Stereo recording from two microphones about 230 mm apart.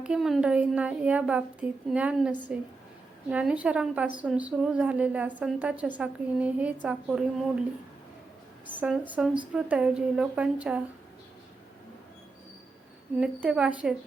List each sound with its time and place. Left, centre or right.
0.0 s speech: centre
8.6 s a woman's voice: centre
13.1 s speech: centre